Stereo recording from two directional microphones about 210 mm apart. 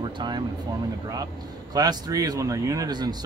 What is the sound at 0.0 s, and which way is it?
Speech, 20° right (ahead or behind).